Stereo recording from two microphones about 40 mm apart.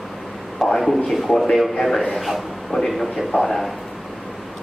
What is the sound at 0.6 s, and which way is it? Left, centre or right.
Speech, centre.